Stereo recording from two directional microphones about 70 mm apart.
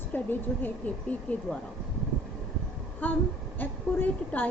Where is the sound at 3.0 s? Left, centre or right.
Left.